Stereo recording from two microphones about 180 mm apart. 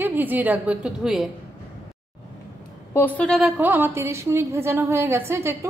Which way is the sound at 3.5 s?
10° right (ahead or behind).